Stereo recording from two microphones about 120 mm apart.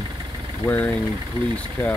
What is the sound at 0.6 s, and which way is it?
Speech, 35° right (ahead or behind).